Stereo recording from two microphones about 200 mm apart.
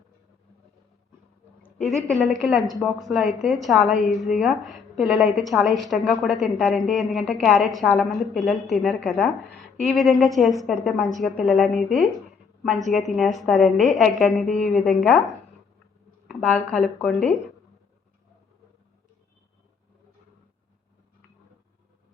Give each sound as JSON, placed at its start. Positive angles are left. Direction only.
{"t": 1.6, "sound": "a woman's voice", "side_deg": 5}
{"t": 13.1, "sound": "a woman's voice", "side_deg": 0}
{"t": 16.2, "sound": "a woman's voice", "side_deg": 0}